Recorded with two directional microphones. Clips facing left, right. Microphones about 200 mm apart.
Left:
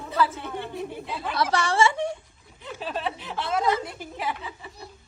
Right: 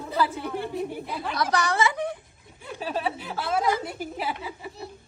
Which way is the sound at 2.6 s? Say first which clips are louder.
Right 2 dB; 10° right (ahead or behind).